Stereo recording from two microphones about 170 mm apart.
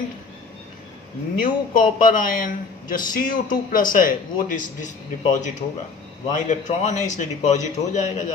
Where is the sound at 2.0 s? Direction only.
55° left (ahead or behind).